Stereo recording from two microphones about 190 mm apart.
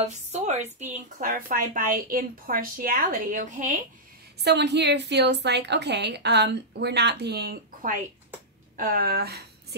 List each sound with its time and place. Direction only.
0.0 s a woman's voice: 35° right (ahead or behind)
4.4 s a woman's voice: 65° right (ahead or behind)